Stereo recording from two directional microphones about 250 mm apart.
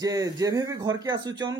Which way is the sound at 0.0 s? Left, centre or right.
Centre.